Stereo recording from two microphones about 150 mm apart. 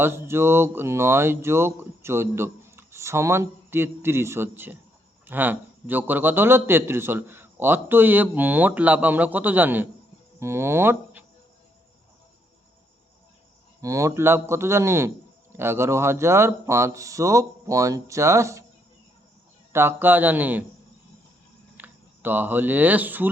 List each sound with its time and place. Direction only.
0.0 s speech: 15° right (ahead or behind)
13.8 s a man's voice: 20° right (ahead or behind)
19.7 s speech: 15° right (ahead or behind)
21.8 s speech: 10° right (ahead or behind)